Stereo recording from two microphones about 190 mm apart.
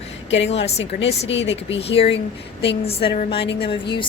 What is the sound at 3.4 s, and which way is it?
Speech, 60° left (ahead or behind).